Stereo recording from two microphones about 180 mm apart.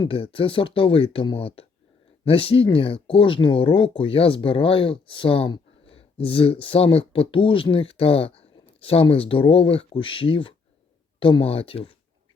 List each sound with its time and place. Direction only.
0.0 s speech: 30° left (ahead or behind)